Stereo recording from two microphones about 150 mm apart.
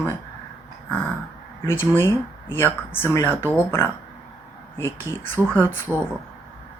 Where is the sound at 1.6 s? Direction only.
15° left (ahead or behind).